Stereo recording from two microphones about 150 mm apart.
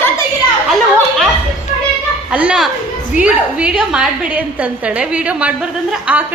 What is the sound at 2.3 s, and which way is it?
A woman's voice, 5° right (ahead or behind).